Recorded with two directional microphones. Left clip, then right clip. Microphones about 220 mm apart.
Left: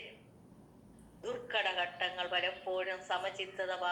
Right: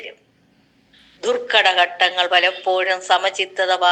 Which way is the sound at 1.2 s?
50° right (ahead or behind).